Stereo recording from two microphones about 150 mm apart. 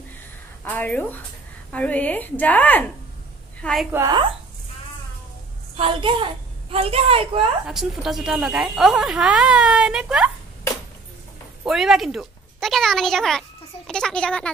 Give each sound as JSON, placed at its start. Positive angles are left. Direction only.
{"t": 0.7, "sound": "a woman's voice", "side_deg": 10}
{"t": 3.9, "sound": "a woman's voice", "side_deg": -20}
{"t": 5.8, "sound": "a woman's voice", "side_deg": -35}
{"t": 7.6, "sound": "a woman's voice", "side_deg": 0}
{"t": 11.6, "sound": "speech", "side_deg": 0}